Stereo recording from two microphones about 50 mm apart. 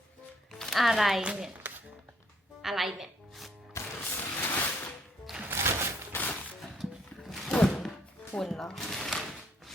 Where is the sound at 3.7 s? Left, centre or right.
Left.